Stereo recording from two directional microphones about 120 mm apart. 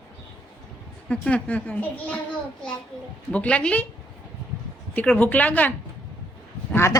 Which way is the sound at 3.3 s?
10° left (ahead or behind).